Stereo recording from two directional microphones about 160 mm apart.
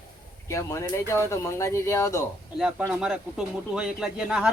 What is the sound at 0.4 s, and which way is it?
Speech, 20° left (ahead or behind).